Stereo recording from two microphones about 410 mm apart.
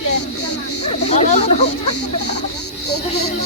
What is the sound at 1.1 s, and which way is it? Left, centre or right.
Speech, centre.